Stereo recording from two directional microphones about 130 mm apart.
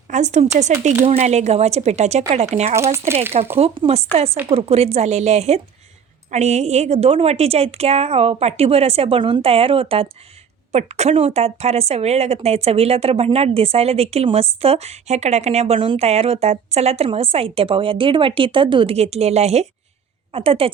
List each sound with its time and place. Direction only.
0.1 s speech: 65° right (ahead or behind)
2.7 s speech: 20° right (ahead or behind)
3.6 s a woman's voice: 50° right (ahead or behind)
10.7 s a woman's voice: 55° right (ahead or behind)